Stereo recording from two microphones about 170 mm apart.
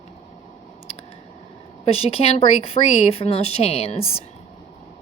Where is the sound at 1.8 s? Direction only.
35° left (ahead or behind).